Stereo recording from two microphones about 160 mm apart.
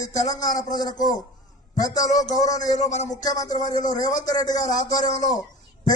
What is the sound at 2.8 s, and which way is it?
Speech, 45° left (ahead or behind).